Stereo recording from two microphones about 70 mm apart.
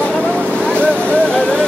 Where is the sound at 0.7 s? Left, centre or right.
Centre.